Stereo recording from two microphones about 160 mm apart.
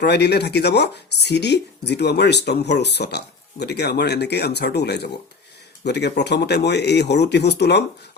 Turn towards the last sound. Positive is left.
turn(degrees=90)